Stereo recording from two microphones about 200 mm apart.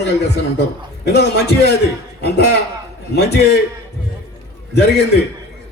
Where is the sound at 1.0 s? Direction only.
55° left (ahead or behind).